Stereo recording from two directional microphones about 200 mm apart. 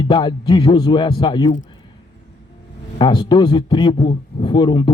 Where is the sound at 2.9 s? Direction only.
25° left (ahead or behind).